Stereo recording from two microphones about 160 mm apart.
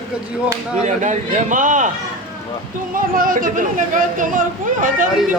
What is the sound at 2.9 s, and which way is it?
Speech, 60° right (ahead or behind).